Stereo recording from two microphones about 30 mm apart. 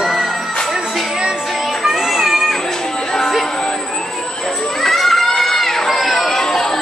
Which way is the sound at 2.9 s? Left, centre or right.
Left.